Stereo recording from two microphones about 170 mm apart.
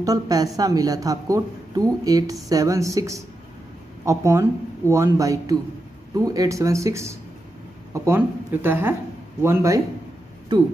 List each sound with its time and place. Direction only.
0.0 s a woman's voice: 20° right (ahead or behind)